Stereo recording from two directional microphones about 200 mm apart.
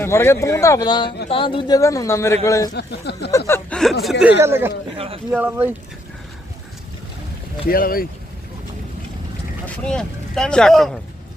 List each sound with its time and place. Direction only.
0.0 s a man's voice: 10° left (ahead or behind)
2.7 s speech: 55° left (ahead or behind)
3.3 s a sound: 10° left (ahead or behind)
4.4 s speech: 10° right (ahead or behind)
4.9 s speech: 30° right (ahead or behind)
5.3 s speech: 10° right (ahead or behind)
7.7 s speech: 45° left (ahead or behind)
9.6 s speech: 5° left (ahead or behind)